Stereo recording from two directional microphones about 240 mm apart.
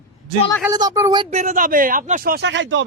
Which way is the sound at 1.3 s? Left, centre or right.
Right.